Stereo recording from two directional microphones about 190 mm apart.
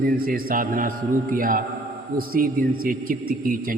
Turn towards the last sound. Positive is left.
turn(degrees=-45)  # may be behind; listen again after turning